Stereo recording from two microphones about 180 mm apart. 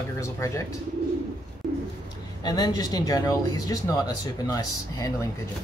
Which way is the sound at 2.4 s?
20° left (ahead or behind).